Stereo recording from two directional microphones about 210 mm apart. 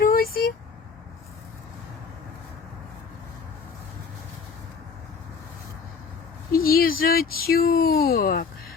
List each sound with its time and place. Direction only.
0.0 s vehicle: 45° left (ahead or behind)
6.5 s speech: 45° left (ahead or behind)